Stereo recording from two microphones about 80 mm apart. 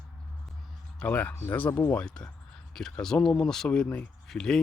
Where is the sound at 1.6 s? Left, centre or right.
Centre.